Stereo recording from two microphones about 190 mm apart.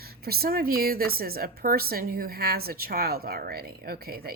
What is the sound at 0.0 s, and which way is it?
A woman's voice, 55° right (ahead or behind).